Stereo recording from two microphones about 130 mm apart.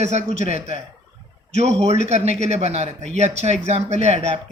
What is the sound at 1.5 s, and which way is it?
Speech, 55° right (ahead or behind).